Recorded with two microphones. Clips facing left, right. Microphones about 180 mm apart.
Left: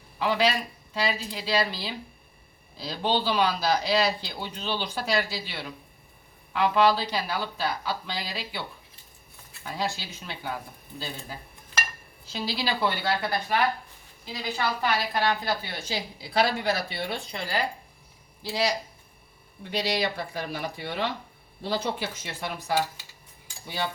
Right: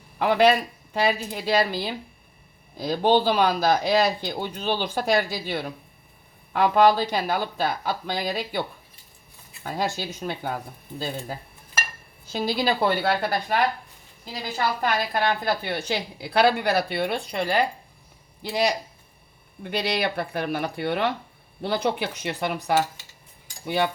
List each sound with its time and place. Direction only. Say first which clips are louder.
0.2 s a woman's voice: right 6 dB; 55° right (ahead or behind)
9.6 s speech: right 4 dB; 50° right (ahead or behind)
12.3 s a woman's voice: right 6 dB; 50° right (ahead or behind)
19.7 s a woman's voice: right 2 dB; 60° right (ahead or behind)